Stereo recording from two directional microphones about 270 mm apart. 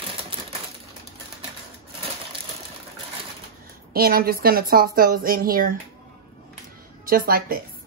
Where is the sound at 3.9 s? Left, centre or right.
Right.